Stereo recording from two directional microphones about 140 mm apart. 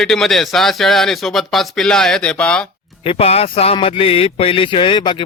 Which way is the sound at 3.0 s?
45° left (ahead or behind).